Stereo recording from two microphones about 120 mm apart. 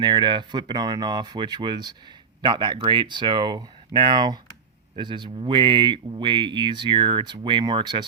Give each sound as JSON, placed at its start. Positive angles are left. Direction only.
{"t": 0.0, "sound": "speech", "side_deg": -40}